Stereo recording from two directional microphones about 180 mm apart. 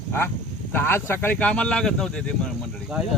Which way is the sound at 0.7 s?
15° left (ahead or behind).